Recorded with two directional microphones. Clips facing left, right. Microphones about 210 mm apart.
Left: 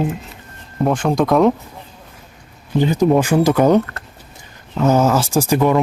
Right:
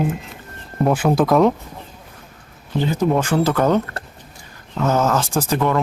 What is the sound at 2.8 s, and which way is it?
Speech, 15° left (ahead or behind).